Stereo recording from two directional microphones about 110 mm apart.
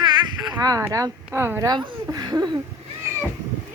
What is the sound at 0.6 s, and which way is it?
Speech, 35° right (ahead or behind).